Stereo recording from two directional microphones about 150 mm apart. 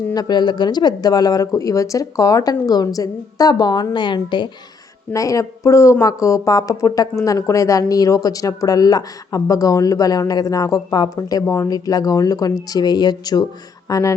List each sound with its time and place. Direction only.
0.1 s speech: 25° left (ahead or behind)